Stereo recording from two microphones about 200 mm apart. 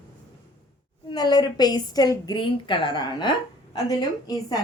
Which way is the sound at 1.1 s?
20° left (ahead or behind).